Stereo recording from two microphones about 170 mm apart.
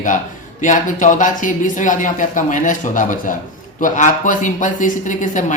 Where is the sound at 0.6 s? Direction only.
50° left (ahead or behind).